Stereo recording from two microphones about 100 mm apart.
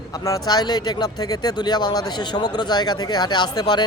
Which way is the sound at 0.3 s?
40° left (ahead or behind).